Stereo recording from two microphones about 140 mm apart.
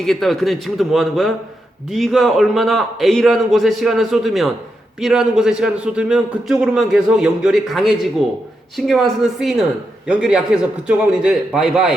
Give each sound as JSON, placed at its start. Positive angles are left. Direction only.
{"t": 0.0, "sound": "a man's voice", "side_deg": 5}